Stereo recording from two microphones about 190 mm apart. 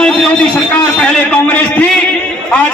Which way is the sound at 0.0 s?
5° left (ahead or behind).